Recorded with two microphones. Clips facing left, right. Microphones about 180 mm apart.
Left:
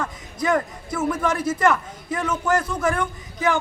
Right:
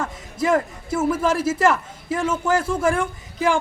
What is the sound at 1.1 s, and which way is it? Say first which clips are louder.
Speech: right 2 dB; 5° right (ahead or behind).